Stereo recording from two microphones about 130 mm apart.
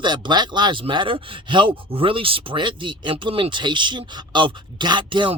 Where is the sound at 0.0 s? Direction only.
35° right (ahead or behind).